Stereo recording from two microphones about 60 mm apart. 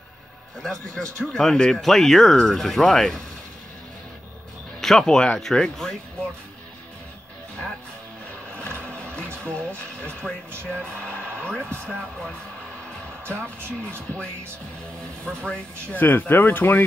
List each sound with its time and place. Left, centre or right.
0.6 s a man's voice: centre
4.7 s a man's voice: centre
8.5 s music: centre
9.4 s a man's voice: centre
15.2 s a man's voice: centre
15.9 s speech: left